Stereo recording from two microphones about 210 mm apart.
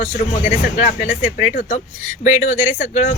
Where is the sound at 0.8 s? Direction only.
35° left (ahead or behind).